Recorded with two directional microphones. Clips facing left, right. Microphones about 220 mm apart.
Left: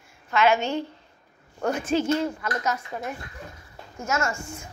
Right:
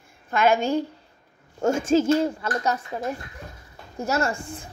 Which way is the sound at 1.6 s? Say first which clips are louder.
Right 4 dB; 25° right (ahead or behind).